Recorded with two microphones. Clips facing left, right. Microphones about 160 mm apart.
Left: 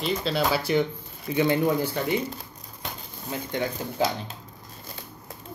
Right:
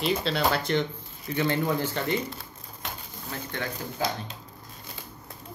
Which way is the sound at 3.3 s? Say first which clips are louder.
Left 5 dB; 15° left (ahead or behind).